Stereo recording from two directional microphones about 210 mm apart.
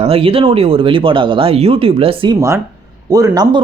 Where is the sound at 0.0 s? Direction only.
25° right (ahead or behind).